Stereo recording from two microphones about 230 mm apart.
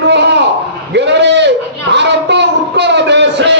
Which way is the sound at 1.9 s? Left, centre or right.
Right.